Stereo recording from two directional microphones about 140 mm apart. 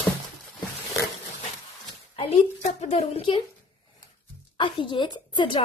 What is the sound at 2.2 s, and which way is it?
A woman's voice, 50° left (ahead or behind).